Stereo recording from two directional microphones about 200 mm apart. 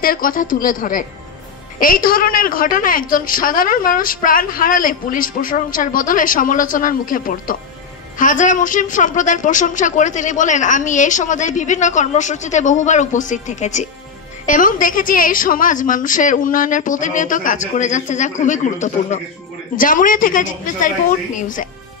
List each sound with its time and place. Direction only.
0.0 s a woman's voice: 45° left (ahead or behind)